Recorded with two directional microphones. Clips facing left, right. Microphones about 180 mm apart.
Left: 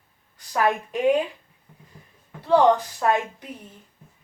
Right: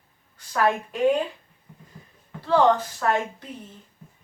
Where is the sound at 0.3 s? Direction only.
15° left (ahead or behind).